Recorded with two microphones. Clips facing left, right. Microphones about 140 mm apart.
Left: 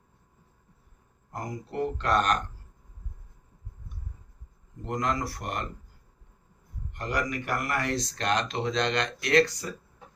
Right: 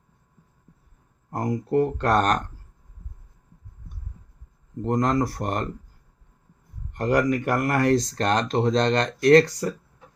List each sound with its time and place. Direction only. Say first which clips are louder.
1.3 s speech: right 12 dB; 50° right (ahead or behind)
4.8 s speech: right 7 dB; 40° right (ahead or behind)
6.9 s speech: right 9 dB; 45° right (ahead or behind)